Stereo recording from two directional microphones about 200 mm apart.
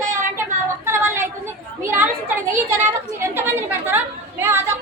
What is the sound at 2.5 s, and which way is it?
Chatter, 10° right (ahead or behind).